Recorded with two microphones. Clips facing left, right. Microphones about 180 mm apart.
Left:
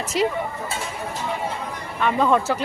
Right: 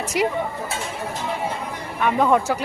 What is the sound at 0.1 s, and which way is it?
Speech, 15° right (ahead or behind).